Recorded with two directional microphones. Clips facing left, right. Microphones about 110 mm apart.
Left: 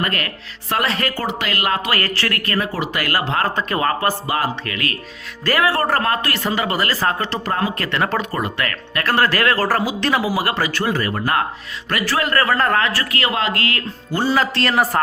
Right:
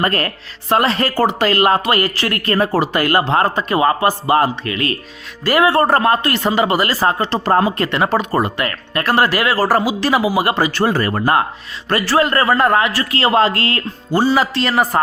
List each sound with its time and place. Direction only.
0.0 s speech: 35° right (ahead or behind)
2.0 s speech: 15° right (ahead or behind)
2.6 s speech: 40° right (ahead or behind)
3.5 s speech: 15° right (ahead or behind)
4.3 s speech: 30° right (ahead or behind)
8.3 s speech: 30° right (ahead or behind)
10.8 s speech: 40° right (ahead or behind)
11.9 s speech: 30° right (ahead or behind)
14.3 s a man's voice: centre (ahead or behind)